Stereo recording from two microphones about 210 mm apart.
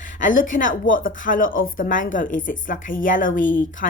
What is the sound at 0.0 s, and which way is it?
Speech, 40° left (ahead or behind).